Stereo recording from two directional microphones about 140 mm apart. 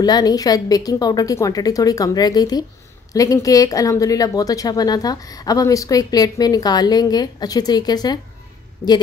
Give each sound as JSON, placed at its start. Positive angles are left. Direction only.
{"t": 0.0, "sound": "speech", "side_deg": 30}